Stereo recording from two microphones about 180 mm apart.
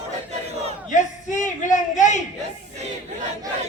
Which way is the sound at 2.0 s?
40° left (ahead or behind).